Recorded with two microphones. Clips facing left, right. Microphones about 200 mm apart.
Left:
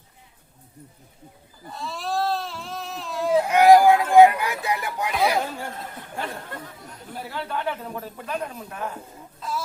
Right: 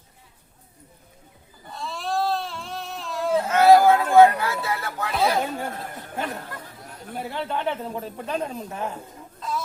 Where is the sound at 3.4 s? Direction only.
15° left (ahead or behind).